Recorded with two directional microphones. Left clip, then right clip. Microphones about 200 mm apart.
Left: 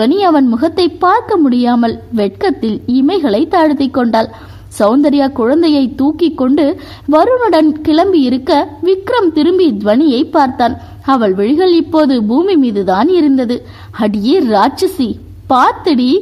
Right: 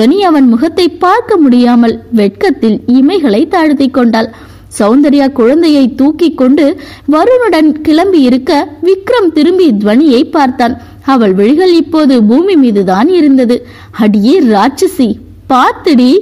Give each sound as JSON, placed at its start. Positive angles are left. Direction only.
{"t": 0.0, "sound": "a woman's voice", "side_deg": -20}